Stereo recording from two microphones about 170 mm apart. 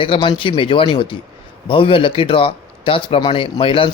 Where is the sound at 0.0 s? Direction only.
30° left (ahead or behind).